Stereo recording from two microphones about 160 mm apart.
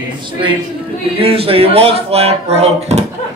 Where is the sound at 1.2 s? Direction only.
35° right (ahead or behind).